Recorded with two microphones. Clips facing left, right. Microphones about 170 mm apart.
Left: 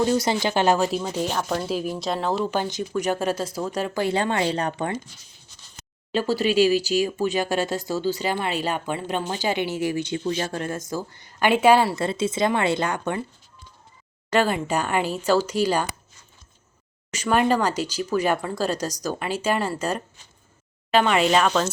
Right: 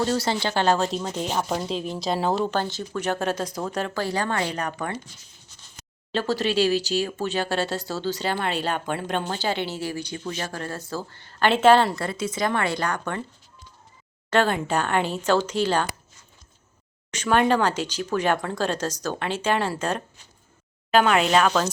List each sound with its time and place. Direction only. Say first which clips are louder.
0.0 s speech: left 3 dB; 15° left (ahead or behind)
1.3 s speech: even; 10° right (ahead or behind)
1.6 s speech: left 1 dB; 5° left (ahead or behind)
2.5 s speech: left 1 dB; 15° left (ahead or behind)
4.0 s speech: left 5 dB; 20° left (ahead or behind)
6.1 s speech: left 2 dB; 10° left (ahead or behind)
11.9 s speech: left 4 dB; 25° left (ahead or behind)
14.3 s speech: even; 10° left (ahead or behind)
17.1 s speech: even; 5° left (ahead or behind)